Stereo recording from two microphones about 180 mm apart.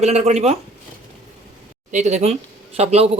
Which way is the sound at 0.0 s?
35° right (ahead or behind).